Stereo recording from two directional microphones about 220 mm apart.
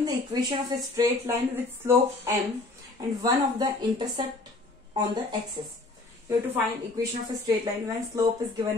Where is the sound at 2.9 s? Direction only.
20° right (ahead or behind).